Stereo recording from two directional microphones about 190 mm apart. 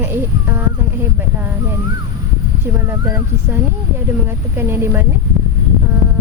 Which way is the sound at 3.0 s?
15° right (ahead or behind).